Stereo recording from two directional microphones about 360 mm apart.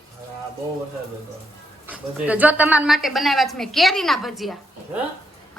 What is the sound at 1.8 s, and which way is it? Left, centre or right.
A woman's voice, centre.